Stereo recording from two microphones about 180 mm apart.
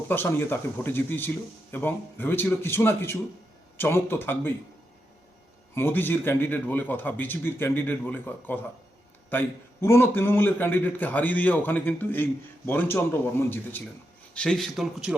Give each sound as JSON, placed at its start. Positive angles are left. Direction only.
{"t": 0.1, "sound": "a man's voice", "side_deg": 10}
{"t": 5.7, "sound": "a man's voice", "side_deg": 10}